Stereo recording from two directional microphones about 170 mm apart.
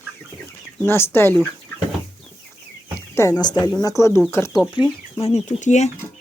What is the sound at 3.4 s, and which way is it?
Speech, 25° left (ahead or behind).